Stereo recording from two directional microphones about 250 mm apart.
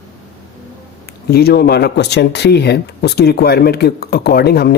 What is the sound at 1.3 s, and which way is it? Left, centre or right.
Speech, left.